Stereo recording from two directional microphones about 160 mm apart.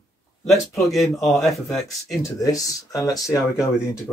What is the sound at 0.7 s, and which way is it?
Speech, centre (ahead or behind).